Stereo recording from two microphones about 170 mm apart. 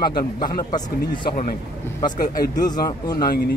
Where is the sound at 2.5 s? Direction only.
25° left (ahead or behind).